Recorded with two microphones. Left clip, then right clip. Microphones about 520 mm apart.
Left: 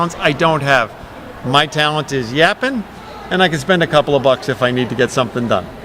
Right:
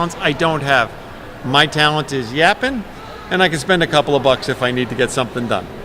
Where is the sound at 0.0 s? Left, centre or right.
Centre.